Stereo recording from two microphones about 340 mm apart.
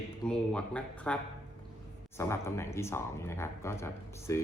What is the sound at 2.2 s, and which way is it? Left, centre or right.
Speech, centre.